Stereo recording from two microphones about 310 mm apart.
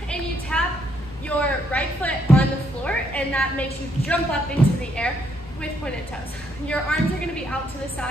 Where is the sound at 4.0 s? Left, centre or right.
Centre.